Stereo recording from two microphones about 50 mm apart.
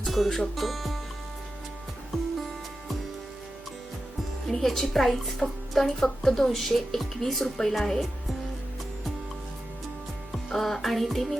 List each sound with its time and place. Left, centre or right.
0.0 s a woman's voice: centre
4.4 s a woman's voice: centre
10.3 s music: centre